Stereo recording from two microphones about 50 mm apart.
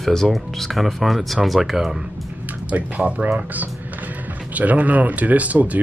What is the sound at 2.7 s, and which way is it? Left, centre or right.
Speech, right.